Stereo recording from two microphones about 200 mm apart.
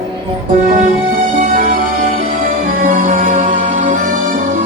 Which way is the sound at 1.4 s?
40° right (ahead or behind).